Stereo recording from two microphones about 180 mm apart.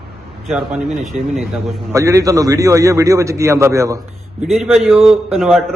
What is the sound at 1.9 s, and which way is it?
A man's voice, 15° right (ahead or behind).